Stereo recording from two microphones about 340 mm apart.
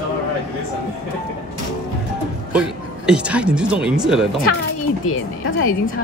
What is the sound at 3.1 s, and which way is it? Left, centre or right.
Speech, centre.